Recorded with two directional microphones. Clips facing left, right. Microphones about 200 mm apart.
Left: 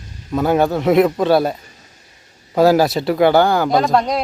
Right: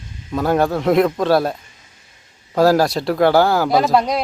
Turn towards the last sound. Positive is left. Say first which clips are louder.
# even
turn(degrees=0)  # may be behind; listen again after turning